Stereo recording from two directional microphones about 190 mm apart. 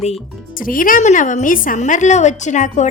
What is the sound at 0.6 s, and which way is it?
A woman's voice, 45° left (ahead or behind).